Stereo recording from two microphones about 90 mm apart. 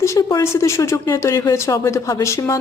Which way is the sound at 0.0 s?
35° left (ahead or behind).